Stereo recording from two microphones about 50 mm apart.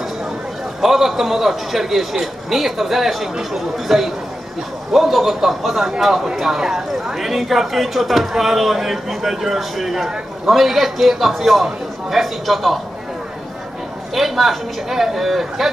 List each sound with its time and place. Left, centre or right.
0.7 s a man's voice: centre
14.1 s a man's voice: centre